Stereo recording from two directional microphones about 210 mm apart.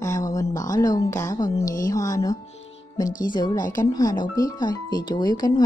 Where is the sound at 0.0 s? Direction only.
15° left (ahead or behind).